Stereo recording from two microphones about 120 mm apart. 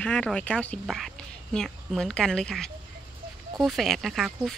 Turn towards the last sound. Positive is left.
turn(degrees=0)  # may be behind; listen again after turning